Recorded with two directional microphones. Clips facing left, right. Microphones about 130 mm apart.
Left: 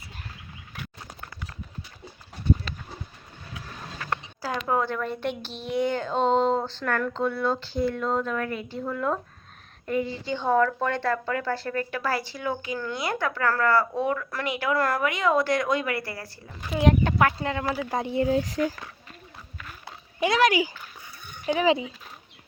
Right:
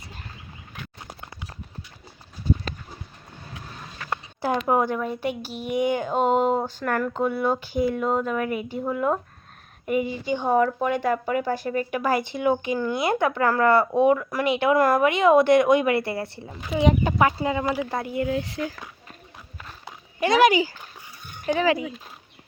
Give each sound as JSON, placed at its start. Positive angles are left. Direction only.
{"t": 2.5, "sound": "a sound", "side_deg": 60}
{"t": 4.4, "sound": "speech", "side_deg": -25}
{"t": 16.6, "sound": "speech", "side_deg": 0}
{"t": 18.0, "sound": "speech", "side_deg": 30}
{"t": 21.4, "sound": "speech", "side_deg": 15}